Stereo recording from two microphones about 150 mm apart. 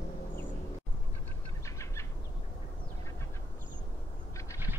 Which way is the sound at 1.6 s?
20° left (ahead or behind).